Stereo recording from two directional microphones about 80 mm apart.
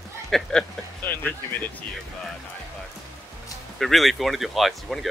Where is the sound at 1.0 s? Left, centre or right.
Left.